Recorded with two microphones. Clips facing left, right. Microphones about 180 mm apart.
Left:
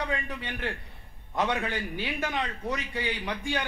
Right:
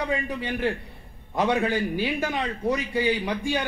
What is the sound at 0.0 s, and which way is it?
A man's voice, 5° right (ahead or behind).